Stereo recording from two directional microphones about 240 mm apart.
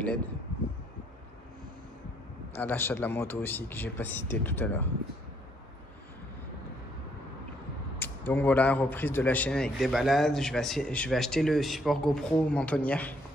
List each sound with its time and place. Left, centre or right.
2.5 s speech: centre
8.0 s a man's voice: centre